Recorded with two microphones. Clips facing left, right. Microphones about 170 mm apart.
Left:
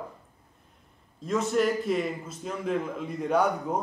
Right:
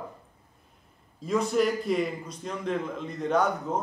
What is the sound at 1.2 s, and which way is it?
A man's voice, centre (ahead or behind).